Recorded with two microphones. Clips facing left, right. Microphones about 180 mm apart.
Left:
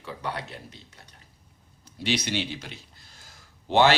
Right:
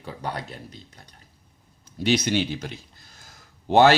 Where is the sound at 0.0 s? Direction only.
40° right (ahead or behind).